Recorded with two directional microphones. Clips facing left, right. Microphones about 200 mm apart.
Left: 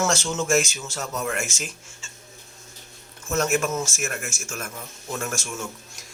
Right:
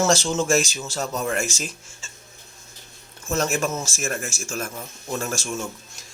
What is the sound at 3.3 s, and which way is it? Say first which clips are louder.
Speech: even; 35° right (ahead or behind).